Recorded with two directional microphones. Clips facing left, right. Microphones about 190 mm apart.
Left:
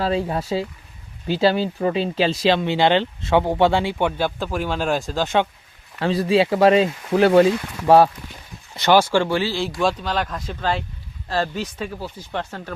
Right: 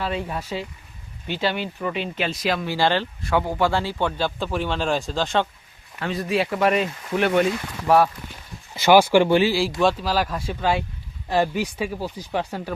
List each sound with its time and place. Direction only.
0.0 s speech: 35° left (ahead or behind); by 5.5 s 10° left (ahead or behind)
6.0 s speech: 30° left (ahead or behind)
8.7 s speech: 10° right (ahead or behind)